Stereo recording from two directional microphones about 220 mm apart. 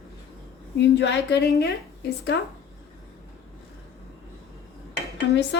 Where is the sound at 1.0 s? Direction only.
50° left (ahead or behind).